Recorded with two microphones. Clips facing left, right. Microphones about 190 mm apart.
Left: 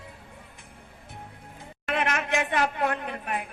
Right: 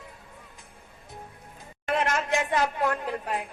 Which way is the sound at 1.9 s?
65° left (ahead or behind).